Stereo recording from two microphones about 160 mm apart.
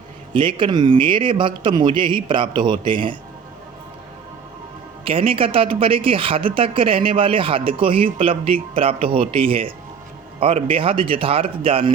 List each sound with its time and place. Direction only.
0.3 s speech: 30° right (ahead or behind)
5.0 s speech: 35° right (ahead or behind)